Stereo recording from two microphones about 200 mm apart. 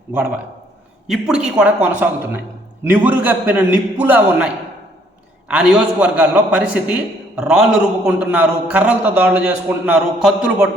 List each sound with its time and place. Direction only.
1.0 s a man's voice: centre (ahead or behind)
5.5 s a man's voice: 5° right (ahead or behind)